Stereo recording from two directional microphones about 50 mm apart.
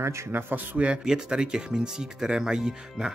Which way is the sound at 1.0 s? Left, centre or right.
Centre.